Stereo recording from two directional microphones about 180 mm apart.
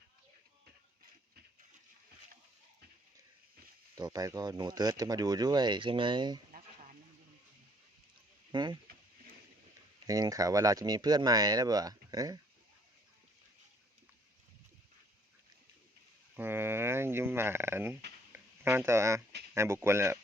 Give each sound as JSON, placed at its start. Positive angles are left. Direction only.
{"t": 3.9, "sound": "speech", "side_deg": -20}
{"t": 8.5, "sound": "speech", "side_deg": -25}
{"t": 10.1, "sound": "speech", "side_deg": -20}
{"t": 16.3, "sound": "a sound", "side_deg": -10}
{"t": 19.5, "sound": "speech", "side_deg": -15}